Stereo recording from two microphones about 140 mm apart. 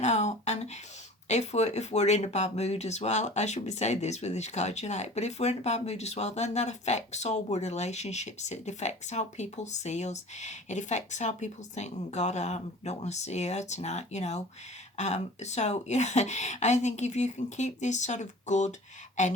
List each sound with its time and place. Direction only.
0.0 s speech: 55° left (ahead or behind)